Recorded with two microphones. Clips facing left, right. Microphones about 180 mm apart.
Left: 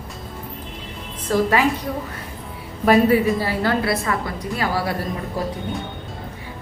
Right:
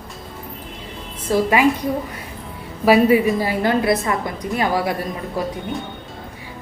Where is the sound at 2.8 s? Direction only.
5° right (ahead or behind).